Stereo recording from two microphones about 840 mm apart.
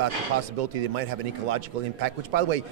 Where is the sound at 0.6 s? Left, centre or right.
Right.